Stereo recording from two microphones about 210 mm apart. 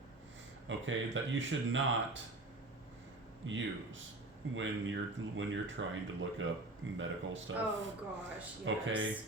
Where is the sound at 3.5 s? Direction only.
65° right (ahead or behind).